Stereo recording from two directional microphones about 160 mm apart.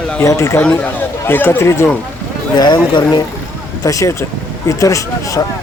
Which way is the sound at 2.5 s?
25° left (ahead or behind).